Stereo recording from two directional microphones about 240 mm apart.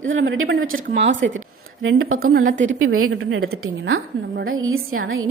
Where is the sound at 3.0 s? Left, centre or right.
Right.